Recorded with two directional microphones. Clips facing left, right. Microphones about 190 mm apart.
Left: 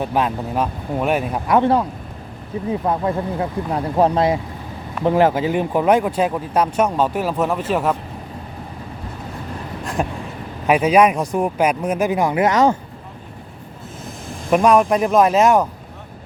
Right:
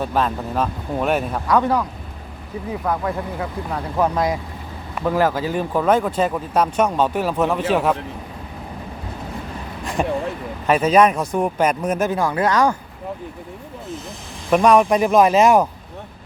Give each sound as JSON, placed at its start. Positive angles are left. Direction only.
{"t": 0.0, "sound": "speech", "side_deg": 15}
{"t": 1.5, "sound": "speech", "side_deg": 25}
{"t": 9.8, "sound": "a sound", "side_deg": 0}
{"t": 10.7, "sound": "speech", "side_deg": 10}
{"t": 14.5, "sound": "speech", "side_deg": 5}